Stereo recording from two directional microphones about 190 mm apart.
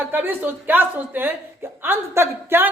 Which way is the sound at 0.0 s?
10° right (ahead or behind).